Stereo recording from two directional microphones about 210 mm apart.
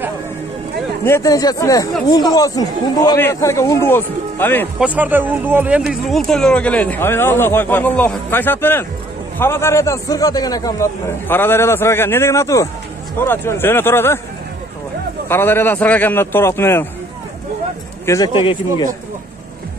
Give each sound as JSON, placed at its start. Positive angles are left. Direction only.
{"t": 1.0, "sound": "speech", "side_deg": 15}
{"t": 4.7, "sound": "speech", "side_deg": -5}
{"t": 15.2, "sound": "speech", "side_deg": 10}
{"t": 18.0, "sound": "speech", "side_deg": 15}